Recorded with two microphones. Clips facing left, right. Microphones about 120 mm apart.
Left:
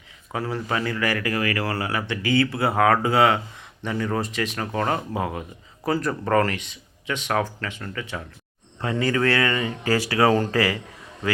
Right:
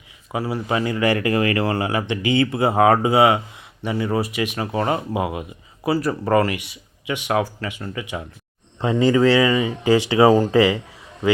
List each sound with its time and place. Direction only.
0.3 s speech: 10° right (ahead or behind)